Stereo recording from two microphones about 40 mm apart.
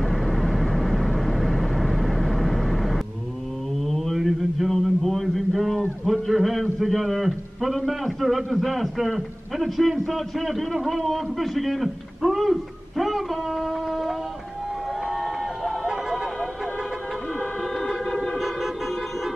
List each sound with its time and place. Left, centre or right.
0.0 s vehicle: centre
3.8 s mantra: centre
4.6 s a sound: centre
6.0 s a man's voice: centre
15.1 s vehicle: centre
18.0 s organ: centre